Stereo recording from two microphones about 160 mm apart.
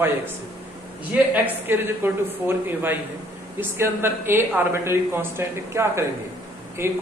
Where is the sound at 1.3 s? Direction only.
15° right (ahead or behind).